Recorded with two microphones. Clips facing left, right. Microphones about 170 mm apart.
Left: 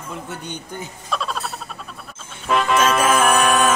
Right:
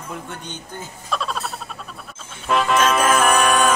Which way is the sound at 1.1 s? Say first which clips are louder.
Even; centre (ahead or behind).